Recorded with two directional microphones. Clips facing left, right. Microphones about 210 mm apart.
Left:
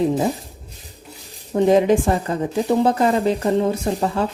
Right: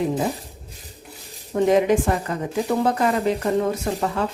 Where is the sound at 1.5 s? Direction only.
30° left (ahead or behind).